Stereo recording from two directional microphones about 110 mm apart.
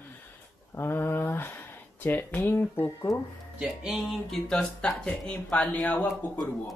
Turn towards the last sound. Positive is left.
turn(degrees=15)  # may be behind; listen again after turning